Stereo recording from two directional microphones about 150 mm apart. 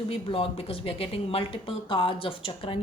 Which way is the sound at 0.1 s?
40° left (ahead or behind).